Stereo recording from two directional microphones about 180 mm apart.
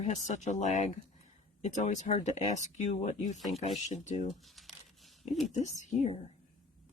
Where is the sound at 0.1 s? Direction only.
40° left (ahead or behind).